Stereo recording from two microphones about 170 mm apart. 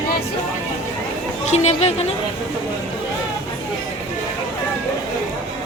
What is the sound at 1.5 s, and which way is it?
Speech, 40° left (ahead or behind).